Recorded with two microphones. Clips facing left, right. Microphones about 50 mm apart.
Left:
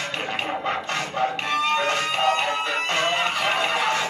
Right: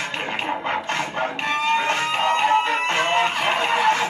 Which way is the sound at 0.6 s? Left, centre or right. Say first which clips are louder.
Right 2 dB; right.